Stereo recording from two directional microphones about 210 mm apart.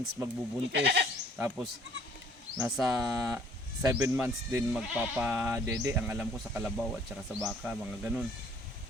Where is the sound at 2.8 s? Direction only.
15° right (ahead or behind).